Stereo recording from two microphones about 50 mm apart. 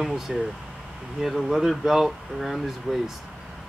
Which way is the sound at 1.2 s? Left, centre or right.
Centre.